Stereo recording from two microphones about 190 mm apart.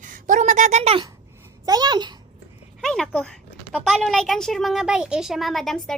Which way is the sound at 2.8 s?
5° left (ahead or behind).